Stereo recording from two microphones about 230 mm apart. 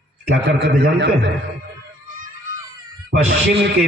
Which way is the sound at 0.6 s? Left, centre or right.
Right.